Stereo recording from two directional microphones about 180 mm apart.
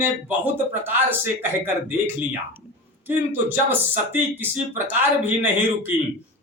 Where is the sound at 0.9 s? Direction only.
10° right (ahead or behind).